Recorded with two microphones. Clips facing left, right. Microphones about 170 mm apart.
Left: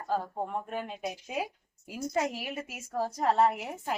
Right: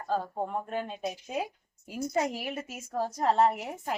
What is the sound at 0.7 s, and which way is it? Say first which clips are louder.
A woman's voice: right 2 dB; 5° left (ahead or behind).